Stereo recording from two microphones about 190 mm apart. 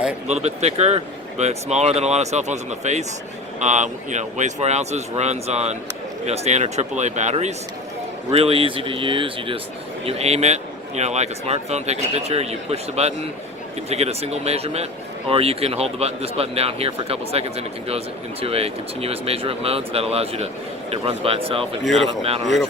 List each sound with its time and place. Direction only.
0.3 s speech: 35° right (ahead or behind)